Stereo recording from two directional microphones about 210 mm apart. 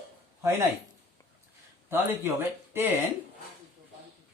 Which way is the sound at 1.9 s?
10° right (ahead or behind).